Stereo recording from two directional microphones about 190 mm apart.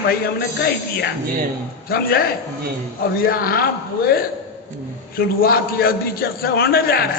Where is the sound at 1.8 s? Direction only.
55° left (ahead or behind).